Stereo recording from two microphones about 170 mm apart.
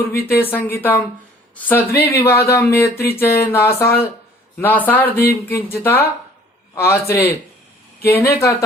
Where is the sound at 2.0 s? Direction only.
15° left (ahead or behind).